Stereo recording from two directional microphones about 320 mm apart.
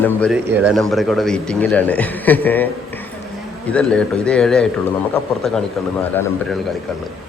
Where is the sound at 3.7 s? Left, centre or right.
Centre.